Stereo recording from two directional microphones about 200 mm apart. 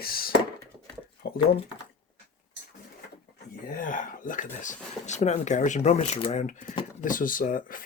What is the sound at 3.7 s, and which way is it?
Speech, 40° left (ahead or behind).